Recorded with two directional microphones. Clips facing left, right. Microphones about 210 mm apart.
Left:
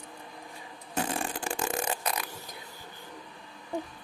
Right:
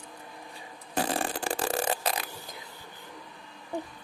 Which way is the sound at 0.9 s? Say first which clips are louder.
Right 2 dB; 35° right (ahead or behind).